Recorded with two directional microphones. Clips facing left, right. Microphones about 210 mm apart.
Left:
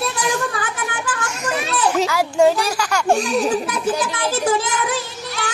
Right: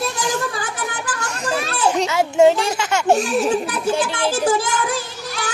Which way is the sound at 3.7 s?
30° right (ahead or behind).